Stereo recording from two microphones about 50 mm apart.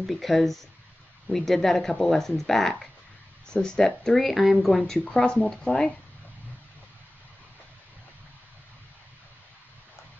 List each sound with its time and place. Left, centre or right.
0.0 s speech: centre